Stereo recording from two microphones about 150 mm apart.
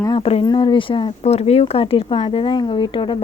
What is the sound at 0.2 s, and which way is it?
Speech, 40° left (ahead or behind).